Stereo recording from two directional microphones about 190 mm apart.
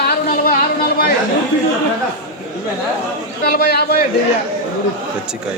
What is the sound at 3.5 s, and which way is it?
Speech, 55° left (ahead or behind).